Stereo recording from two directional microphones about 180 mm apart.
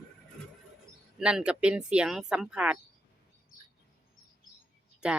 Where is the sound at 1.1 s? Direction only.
5° right (ahead or behind).